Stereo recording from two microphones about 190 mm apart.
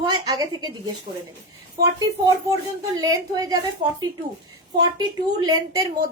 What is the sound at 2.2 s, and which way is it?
A woman's voice, 20° right (ahead or behind).